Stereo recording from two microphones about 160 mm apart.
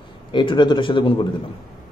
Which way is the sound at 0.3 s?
30° left (ahead or behind).